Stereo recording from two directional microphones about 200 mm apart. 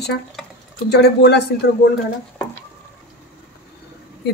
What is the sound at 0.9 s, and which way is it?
Speech, 55° left (ahead or behind).